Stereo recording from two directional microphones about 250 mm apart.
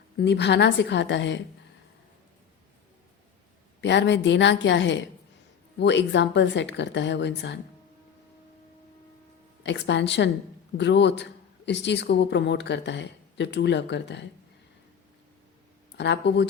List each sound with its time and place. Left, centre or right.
0.2 s speech: left
3.8 s speech: left
9.6 s speech: left
16.0 s speech: left